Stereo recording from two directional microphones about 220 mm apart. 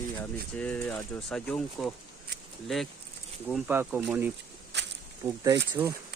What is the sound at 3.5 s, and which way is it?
Speech, 5° right (ahead or behind).